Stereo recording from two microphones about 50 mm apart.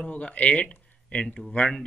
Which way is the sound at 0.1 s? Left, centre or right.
Left.